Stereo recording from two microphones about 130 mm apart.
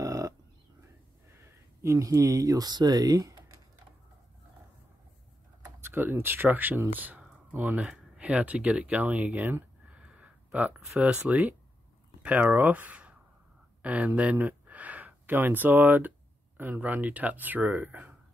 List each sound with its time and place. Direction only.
0.0 s a sound: 25° right (ahead or behind)
1.8 s speech: 25° right (ahead or behind)
5.8 s speech: 15° right (ahead or behind)